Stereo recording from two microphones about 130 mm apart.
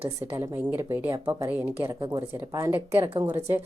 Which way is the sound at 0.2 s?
25° right (ahead or behind).